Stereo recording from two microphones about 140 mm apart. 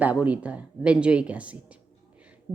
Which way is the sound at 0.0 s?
10° right (ahead or behind).